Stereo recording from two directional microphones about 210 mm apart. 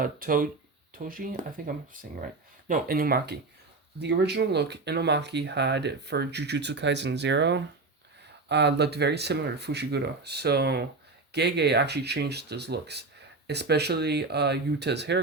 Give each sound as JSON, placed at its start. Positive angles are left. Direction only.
{"t": 0.0, "sound": "speech", "side_deg": -40}